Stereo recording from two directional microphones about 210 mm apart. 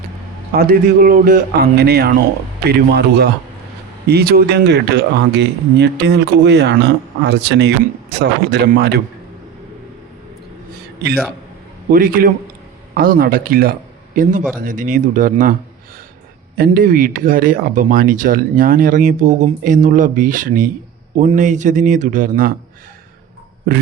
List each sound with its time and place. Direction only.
0.5 s speech: 45° right (ahead or behind)
11.9 s speech: 40° right (ahead or behind)
16.6 s speech: 40° right (ahead or behind)